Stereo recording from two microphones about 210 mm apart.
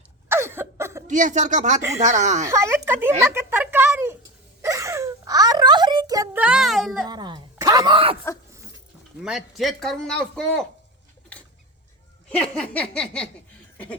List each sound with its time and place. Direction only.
0.3 s a sound: 10° right (ahead or behind)
1.0 s speech: 35° right (ahead or behind)
2.5 s speech: 15° right (ahead or behind)
4.6 s a sound: 15° right (ahead or behind)
7.1 s a woman's voice: 20° right (ahead or behind)
9.2 s a man's voice: centre (ahead or behind)
12.9 s a man's voice: 5° left (ahead or behind)